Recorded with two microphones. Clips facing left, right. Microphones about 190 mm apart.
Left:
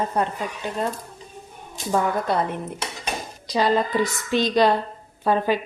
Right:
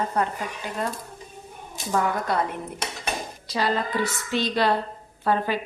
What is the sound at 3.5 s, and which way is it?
A woman's voice, 20° left (ahead or behind).